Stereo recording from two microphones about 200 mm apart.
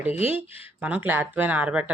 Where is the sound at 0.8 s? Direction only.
10° right (ahead or behind).